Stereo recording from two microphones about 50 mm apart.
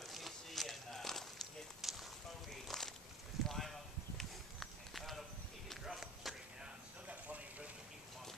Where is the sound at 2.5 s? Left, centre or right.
Centre.